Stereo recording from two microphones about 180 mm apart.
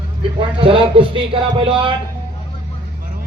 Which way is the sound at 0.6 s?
30° right (ahead or behind).